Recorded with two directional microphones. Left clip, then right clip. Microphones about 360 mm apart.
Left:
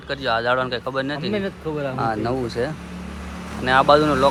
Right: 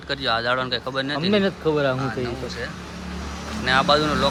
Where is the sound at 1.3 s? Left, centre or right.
Right.